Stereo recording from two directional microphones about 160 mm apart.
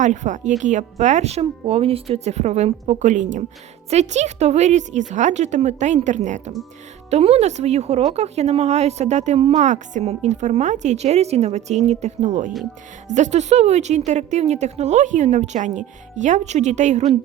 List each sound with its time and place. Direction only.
0.0 s speech: 50° right (ahead or behind)